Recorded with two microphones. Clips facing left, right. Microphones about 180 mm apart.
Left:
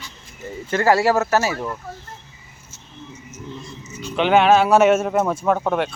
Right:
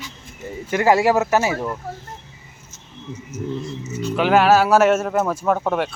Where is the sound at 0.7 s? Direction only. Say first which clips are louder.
Right 1 dB; 15° right (ahead or behind).